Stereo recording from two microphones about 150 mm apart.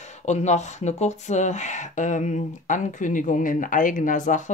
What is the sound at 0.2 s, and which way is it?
Speech, 50° left (ahead or behind).